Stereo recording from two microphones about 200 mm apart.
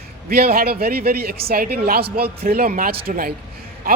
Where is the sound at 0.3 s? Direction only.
50° right (ahead or behind).